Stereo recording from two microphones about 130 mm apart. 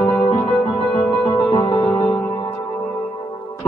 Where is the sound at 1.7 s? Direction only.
10° left (ahead or behind).